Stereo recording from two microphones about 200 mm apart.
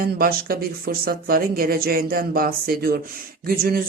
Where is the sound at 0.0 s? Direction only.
50° right (ahead or behind).